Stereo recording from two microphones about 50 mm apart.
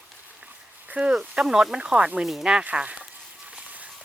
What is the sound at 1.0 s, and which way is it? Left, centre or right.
Speech, right.